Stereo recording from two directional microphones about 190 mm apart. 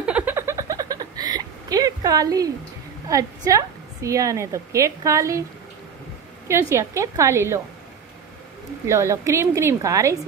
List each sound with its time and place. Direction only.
0.0 s a sound: 10° right (ahead or behind)
3.1 s a woman's voice: 15° right (ahead or behind)
6.7 s a woman's voice: 15° right (ahead or behind)
8.8 s a woman's voice: 15° right (ahead or behind)